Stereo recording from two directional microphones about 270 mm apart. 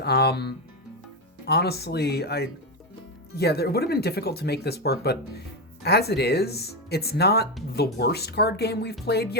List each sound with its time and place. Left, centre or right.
0.0 s speech: left